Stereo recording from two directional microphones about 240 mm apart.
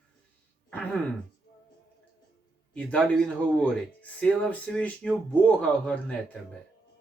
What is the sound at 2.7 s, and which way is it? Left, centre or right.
Speech, centre.